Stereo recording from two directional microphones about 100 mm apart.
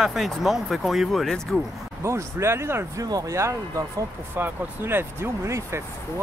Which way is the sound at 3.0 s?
40° right (ahead or behind).